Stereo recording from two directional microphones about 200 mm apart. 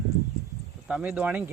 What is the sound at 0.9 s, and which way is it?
Speech, 5° right (ahead or behind).